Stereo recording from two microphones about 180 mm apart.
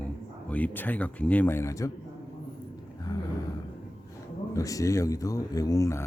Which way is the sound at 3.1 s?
20° left (ahead or behind).